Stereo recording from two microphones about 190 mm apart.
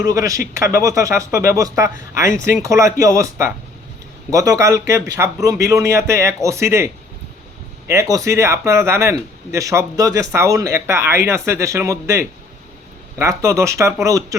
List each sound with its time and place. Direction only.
0.1 s speech: 15° right (ahead or behind)